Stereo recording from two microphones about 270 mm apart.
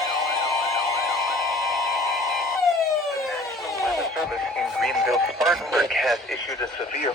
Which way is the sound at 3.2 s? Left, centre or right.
Centre.